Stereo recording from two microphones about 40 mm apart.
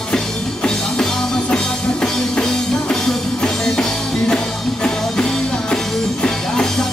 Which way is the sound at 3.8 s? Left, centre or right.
Centre.